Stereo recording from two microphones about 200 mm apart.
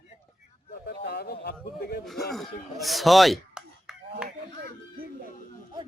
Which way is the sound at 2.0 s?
Centre (ahead or behind).